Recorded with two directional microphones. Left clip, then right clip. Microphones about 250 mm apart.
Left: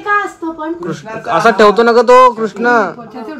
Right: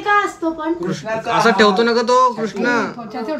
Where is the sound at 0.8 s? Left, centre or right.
Centre.